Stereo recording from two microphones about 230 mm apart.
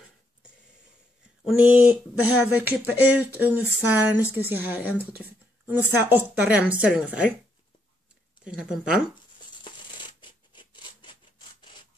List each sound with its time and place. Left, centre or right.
1.4 s speech: centre
4.2 s speech: centre
4.6 s speech: centre
8.5 s speech: centre
10.2 s rub: centre